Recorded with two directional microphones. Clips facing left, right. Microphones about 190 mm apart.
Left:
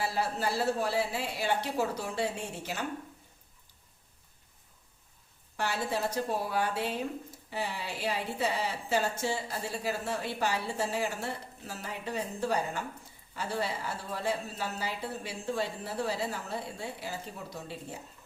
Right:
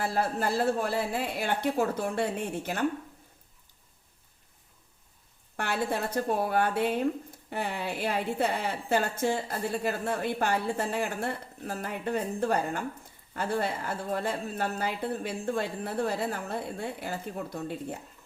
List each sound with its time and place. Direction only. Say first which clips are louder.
0.0 s a woman's voice: right 3 dB; 50° right (ahead or behind)
5.5 s a woman's voice: right 2 dB; 55° right (ahead or behind)